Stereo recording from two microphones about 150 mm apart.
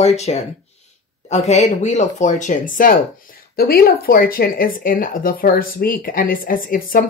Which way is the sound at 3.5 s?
90° left.